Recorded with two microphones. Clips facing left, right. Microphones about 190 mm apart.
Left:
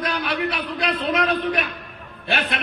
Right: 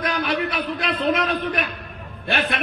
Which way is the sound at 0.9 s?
50° right (ahead or behind).